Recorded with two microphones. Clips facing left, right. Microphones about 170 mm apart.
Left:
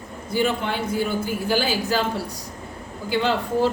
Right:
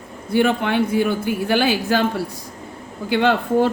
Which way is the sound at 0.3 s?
60° right (ahead or behind).